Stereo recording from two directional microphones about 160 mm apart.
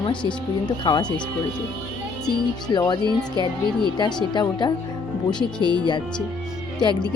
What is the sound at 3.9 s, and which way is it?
Speech, 25° left (ahead or behind).